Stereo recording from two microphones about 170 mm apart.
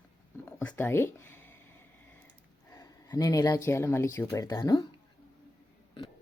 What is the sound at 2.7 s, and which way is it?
Speech, 20° left (ahead or behind).